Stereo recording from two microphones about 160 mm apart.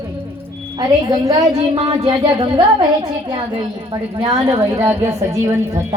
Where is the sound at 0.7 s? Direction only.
25° right (ahead or behind).